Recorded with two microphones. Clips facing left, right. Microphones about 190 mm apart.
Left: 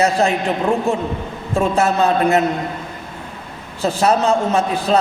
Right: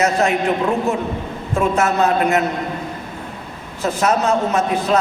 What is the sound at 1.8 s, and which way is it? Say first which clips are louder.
Speech: left 2 dB; 30° left (ahead or behind).